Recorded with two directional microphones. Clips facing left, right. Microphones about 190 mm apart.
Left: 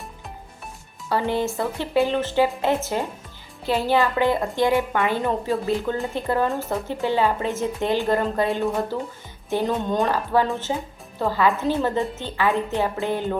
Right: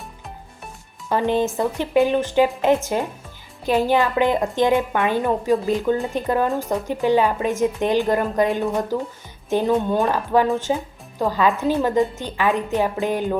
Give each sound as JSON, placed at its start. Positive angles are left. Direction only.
{"t": 1.1, "sound": "speech", "side_deg": -20}